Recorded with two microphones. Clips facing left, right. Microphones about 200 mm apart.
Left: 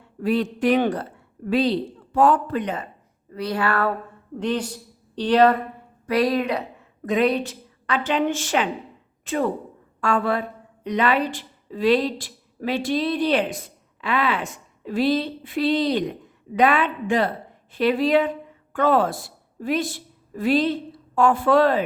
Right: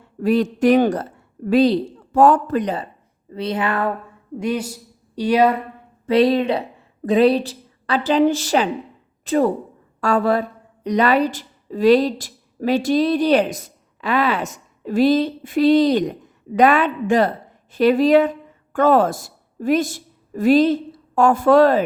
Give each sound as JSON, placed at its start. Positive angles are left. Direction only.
{"t": 0.2, "sound": "a man's voice", "side_deg": -45}
{"t": 3.2, "sound": "speech", "side_deg": -20}
{"t": 4.4, "sound": "speech", "side_deg": -10}
{"t": 6.1, "sound": "a woman's voice", "side_deg": -25}